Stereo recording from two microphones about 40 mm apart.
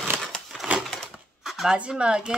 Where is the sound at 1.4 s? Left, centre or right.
Centre.